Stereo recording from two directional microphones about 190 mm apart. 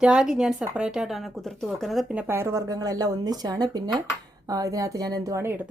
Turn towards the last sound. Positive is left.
turn(degrees=-15)  # may be behind; listen again after turning